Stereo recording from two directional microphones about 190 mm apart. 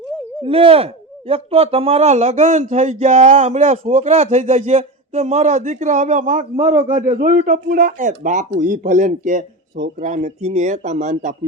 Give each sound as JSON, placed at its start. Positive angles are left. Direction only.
{"t": 0.4, "sound": "a man's voice", "side_deg": -30}